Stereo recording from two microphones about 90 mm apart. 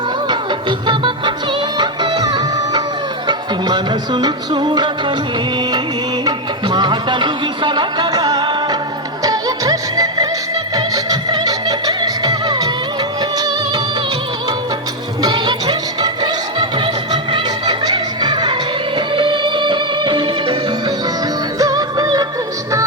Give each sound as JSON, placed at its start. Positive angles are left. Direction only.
{"t": 0.9, "sound": "music", "side_deg": -60}
{"t": 6.2, "sound": "music", "side_deg": -55}
{"t": 15.2, "sound": "music", "side_deg": -50}
{"t": 18.9, "sound": "music", "side_deg": -65}
{"t": 21.6, "sound": "music", "side_deg": -45}